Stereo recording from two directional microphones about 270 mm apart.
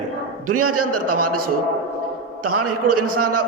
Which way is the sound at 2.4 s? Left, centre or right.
Right.